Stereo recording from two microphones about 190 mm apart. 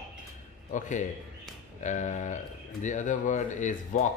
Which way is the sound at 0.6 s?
40° left (ahead or behind).